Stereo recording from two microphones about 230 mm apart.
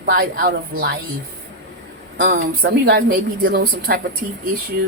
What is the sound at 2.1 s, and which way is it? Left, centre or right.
A woman's voice, right.